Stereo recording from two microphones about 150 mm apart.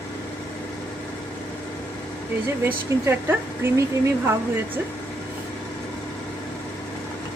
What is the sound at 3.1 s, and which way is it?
Speech, 15° right (ahead or behind).